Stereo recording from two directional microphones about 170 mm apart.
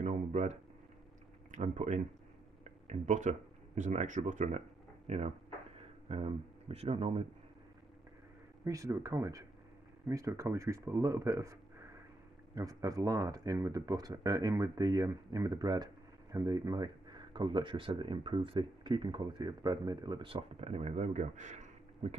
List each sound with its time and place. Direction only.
0.0 s a sound: 40° right (ahead or behind)
1.5 s speech: 45° right (ahead or behind)
8.6 s speech: 20° right (ahead or behind); by 22.1 s 45° right (ahead or behind)